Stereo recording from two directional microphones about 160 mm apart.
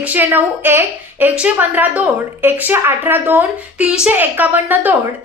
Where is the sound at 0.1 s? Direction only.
10° right (ahead or behind).